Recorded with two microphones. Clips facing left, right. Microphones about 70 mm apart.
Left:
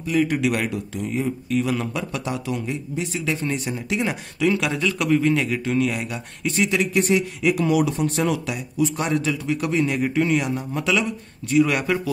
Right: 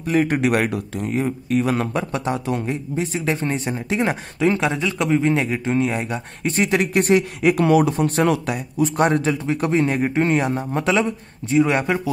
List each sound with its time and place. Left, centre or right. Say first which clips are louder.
0.0 s speech: right 2 dB; right